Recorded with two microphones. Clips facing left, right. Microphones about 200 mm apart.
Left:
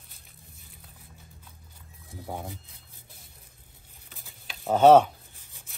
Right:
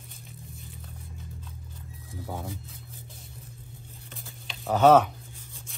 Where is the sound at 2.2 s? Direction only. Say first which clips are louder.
Even; 15° left (ahead or behind).